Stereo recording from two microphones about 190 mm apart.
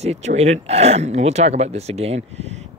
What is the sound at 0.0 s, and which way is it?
Speech, 35° right (ahead or behind).